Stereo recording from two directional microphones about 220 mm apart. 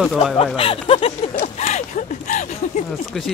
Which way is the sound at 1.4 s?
30° left (ahead or behind).